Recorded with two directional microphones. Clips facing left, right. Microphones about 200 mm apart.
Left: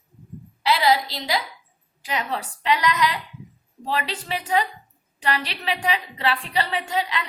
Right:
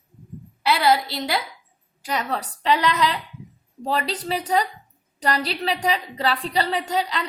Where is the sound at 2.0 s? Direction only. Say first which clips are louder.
Right 1 dB; 40° right (ahead or behind).